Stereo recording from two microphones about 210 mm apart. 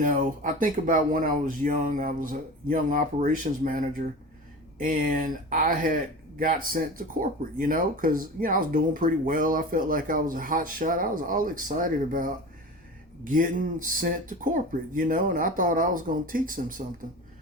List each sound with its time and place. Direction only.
0.0 s speech: 40° right (ahead or behind)
13.3 s speech: 40° right (ahead or behind)